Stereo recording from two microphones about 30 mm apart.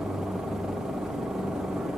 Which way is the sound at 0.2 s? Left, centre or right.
Centre.